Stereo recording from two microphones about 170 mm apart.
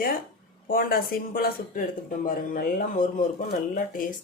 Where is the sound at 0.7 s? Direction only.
60° left (ahead or behind).